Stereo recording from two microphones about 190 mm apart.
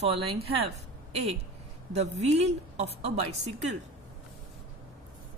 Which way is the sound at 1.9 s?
35° right (ahead or behind).